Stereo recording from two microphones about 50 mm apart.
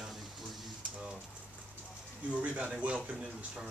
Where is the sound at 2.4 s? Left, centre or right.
Right.